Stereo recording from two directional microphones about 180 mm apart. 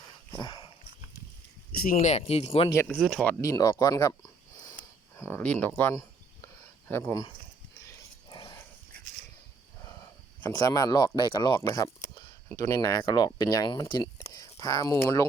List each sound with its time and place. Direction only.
0.3 s dog: 25° left (ahead or behind)
1.7 s speech: 50° left (ahead or behind); by 2.7 s 30° left (ahead or behind)
2.7 s speech: 10° left (ahead or behind)
3.4 s a sound: 20° left (ahead or behind)
7.7 s dog: 15° left (ahead or behind)
10.5 s speech: 20° left (ahead or behind)